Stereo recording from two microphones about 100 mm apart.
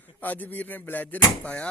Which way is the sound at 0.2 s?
15° left (ahead or behind).